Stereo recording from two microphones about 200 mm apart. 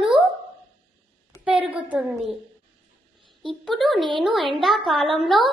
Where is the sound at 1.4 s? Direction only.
5° right (ahead or behind).